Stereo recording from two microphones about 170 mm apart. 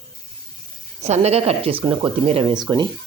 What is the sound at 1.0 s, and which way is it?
Speech, 40° right (ahead or behind).